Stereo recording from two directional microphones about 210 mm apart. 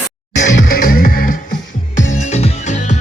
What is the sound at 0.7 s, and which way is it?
Music, 40° left (ahead or behind).